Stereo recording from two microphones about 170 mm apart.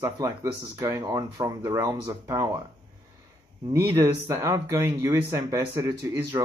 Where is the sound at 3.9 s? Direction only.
15° right (ahead or behind).